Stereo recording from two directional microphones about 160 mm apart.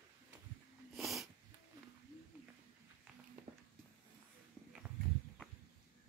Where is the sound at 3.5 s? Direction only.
45° right (ahead or behind).